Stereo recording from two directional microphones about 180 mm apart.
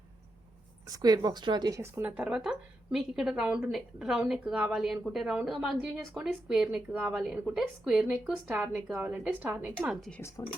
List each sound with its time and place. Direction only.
0.9 s speech: 20° right (ahead or behind); by 10.2 s centre (ahead or behind)
10.2 s speech: 15° left (ahead or behind)